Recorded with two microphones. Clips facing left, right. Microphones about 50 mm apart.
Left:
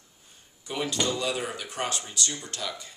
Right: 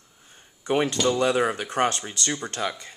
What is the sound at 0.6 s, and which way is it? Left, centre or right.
Speech, right.